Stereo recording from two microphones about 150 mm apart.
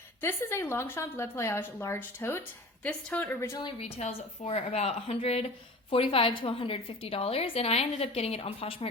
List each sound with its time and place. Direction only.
0.2 s a woman's voice: 15° left (ahead or behind)
3.8 s a woman's voice: 45° left (ahead or behind)